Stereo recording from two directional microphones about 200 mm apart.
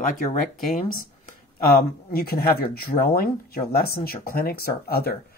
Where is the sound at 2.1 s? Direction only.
50° left (ahead or behind).